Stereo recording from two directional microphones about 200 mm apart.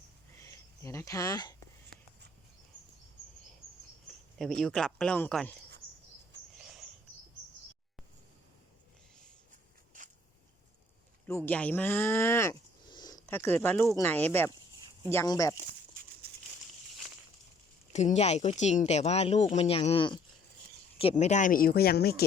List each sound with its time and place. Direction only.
0.4 s speech: 15° left (ahead or behind)
4.4 s speech: centre (ahead or behind)
6.6 s a sound: centre (ahead or behind)
11.4 s speech: 5° left (ahead or behind)
17.9 s speech: 35° left (ahead or behind); by 22.1 s 50° left (ahead or behind)